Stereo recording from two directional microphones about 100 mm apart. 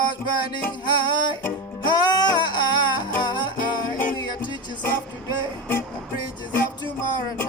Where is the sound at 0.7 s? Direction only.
45° left (ahead or behind).